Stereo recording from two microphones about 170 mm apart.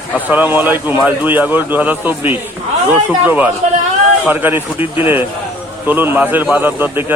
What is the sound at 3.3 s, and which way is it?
A man's voice, 10° right (ahead or behind).